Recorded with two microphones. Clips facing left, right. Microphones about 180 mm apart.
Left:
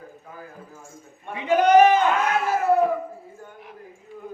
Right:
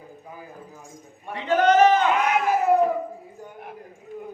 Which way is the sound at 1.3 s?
10° left (ahead or behind).